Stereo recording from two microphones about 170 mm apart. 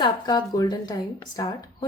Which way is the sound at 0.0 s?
25° left (ahead or behind).